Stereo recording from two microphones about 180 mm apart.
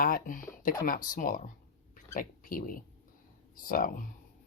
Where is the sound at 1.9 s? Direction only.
50° left (ahead or behind).